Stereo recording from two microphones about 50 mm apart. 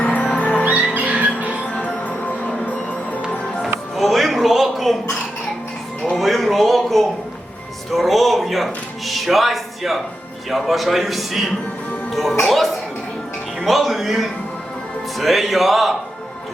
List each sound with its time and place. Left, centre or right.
0.0 s music: left
0.6 s music: right
1.7 s music: left
3.9 s a sound: centre
6.1 s music: centre
10.5 s a man's voice: centre
12.5 s music: centre
15.2 s a man's voice: centre